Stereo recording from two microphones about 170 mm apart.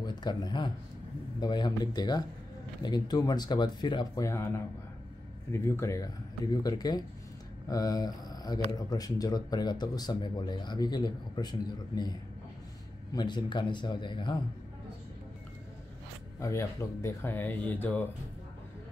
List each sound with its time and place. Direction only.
0.0 s speech: 25° left (ahead or behind)
5.5 s speech: 15° left (ahead or behind)
16.3 s speech: 20° left (ahead or behind)